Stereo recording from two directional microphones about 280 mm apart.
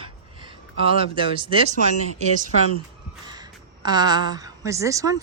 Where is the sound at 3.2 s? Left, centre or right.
Centre.